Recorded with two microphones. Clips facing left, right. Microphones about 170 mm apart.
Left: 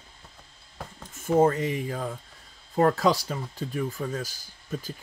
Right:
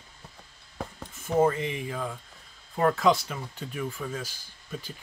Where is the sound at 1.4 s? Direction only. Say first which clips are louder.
Left 2 dB; 40° left (ahead or behind).